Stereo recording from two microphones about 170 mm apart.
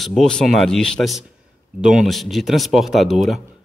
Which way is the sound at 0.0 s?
Centre (ahead or behind).